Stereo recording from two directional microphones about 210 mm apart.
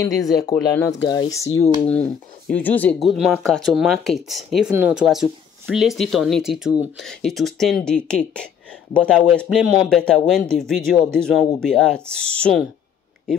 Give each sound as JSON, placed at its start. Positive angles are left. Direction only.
{"t": 0.5, "sound": "speech", "side_deg": 15}